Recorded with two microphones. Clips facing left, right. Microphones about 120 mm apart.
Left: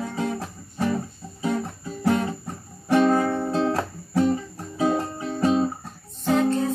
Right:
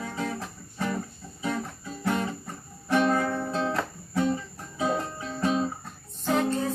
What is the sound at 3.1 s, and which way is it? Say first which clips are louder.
Music: left 5 dB; 25° left (ahead or behind).